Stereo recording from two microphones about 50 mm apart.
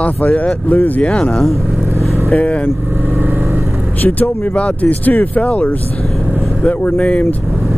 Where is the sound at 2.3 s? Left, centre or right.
Left.